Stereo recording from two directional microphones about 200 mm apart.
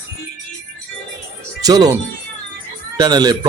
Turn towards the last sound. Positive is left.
turn(degrees=-20)  # may be behind; listen again after turning